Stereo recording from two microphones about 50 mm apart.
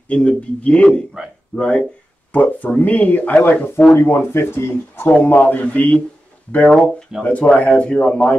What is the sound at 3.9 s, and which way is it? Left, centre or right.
Speech, left.